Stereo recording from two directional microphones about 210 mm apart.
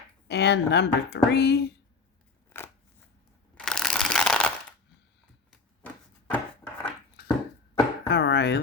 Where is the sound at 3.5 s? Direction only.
Centre (ahead or behind).